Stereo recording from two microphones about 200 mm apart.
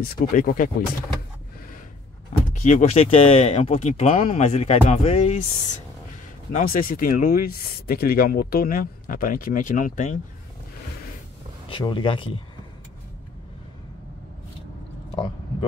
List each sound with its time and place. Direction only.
0.2 s speech: 45° left (ahead or behind)
2.5 s speech: 35° left (ahead or behind)
6.5 s speech: 45° left (ahead or behind)
11.7 s speech: 25° left (ahead or behind)